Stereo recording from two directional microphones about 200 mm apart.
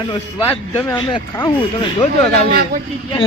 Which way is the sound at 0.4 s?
10° left (ahead or behind).